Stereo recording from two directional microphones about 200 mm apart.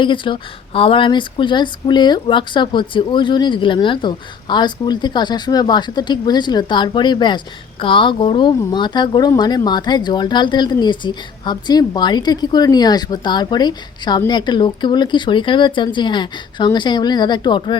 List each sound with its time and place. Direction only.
0.0 s a woman's voice: 25° left (ahead or behind)